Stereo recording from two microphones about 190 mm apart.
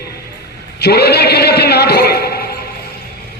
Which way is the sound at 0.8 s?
60° left (ahead or behind).